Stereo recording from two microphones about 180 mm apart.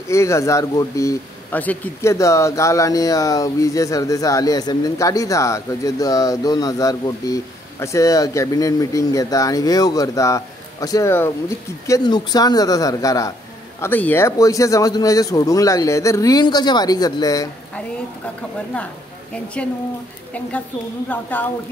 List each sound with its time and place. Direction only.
0.1 s speech: 15° left (ahead or behind)
19.3 s a woman's voice: 5° left (ahead or behind)
21.1 s a woman's voice: 10° left (ahead or behind)